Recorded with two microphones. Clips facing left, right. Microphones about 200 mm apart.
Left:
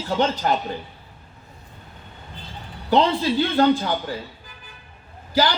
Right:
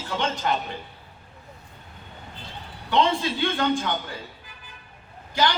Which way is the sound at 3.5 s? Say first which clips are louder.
Left 8 dB; 35° left (ahead or behind).